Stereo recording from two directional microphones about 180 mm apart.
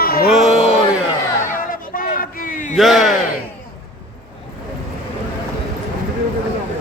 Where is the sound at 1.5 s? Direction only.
50° left (ahead or behind).